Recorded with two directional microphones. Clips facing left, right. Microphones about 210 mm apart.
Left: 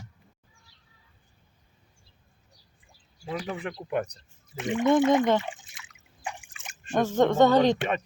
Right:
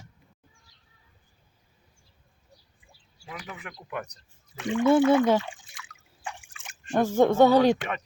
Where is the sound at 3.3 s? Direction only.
30° left (ahead or behind).